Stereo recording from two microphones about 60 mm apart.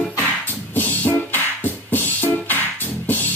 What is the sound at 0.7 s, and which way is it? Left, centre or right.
Music, left.